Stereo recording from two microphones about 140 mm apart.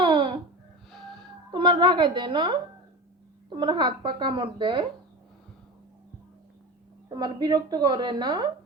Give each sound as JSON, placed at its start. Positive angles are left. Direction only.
{"t": 0.0, "sound": "babbling", "side_deg": -35}
{"t": 0.9, "sound": "wheeze", "side_deg": 0}
{"t": 1.5, "sound": "a woman's voice", "side_deg": -35}
{"t": 7.1, "sound": "a woman's voice", "side_deg": -30}